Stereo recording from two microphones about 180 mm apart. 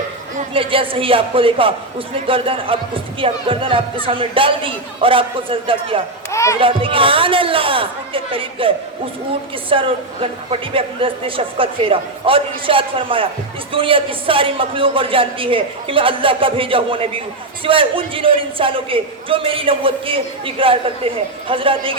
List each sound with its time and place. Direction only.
0.5 s a man's voice: 30° right (ahead or behind)
6.3 s music: 15° left (ahead or behind)
6.6 s a man's voice: 30° right (ahead or behind)